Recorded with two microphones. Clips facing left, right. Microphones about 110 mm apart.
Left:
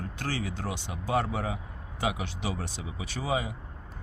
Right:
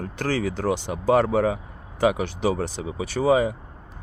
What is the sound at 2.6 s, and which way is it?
Speech, 70° right (ahead or behind).